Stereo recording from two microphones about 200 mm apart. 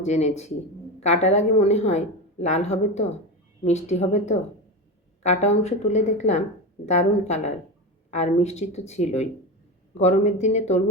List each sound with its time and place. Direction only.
0.0 s a woman's voice: 35° left (ahead or behind)